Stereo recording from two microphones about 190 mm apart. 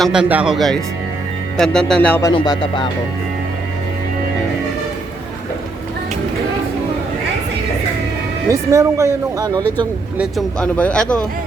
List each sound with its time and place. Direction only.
0.0 s speech: 5° right (ahead or behind)
2.2 s music: 20° left (ahead or behind)
8.4 s speech: 15° right (ahead or behind)
10.2 s speech: centre (ahead or behind)